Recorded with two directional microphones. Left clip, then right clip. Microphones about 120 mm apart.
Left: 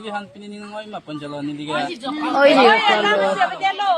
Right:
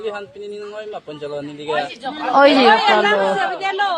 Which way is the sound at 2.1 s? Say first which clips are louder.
Right 2 dB; 30° right (ahead or behind).